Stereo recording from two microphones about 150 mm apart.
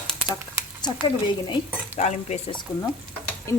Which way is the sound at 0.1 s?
5° right (ahead or behind).